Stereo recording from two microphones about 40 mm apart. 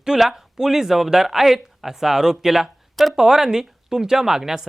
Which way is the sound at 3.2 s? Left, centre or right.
Centre.